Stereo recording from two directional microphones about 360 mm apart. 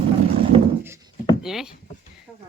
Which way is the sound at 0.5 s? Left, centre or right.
Centre.